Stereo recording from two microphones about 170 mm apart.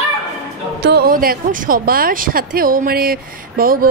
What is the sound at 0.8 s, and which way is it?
Speech, 70° right (ahead or behind).